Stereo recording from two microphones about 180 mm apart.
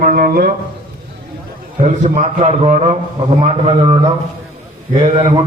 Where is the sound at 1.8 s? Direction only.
40° right (ahead or behind).